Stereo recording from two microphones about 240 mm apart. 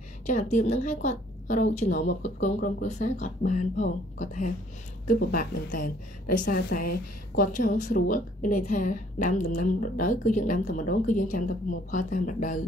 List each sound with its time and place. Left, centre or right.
0.3 s a woman's voice: left